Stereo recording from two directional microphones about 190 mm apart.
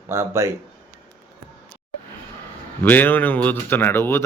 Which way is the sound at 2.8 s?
10° left (ahead or behind).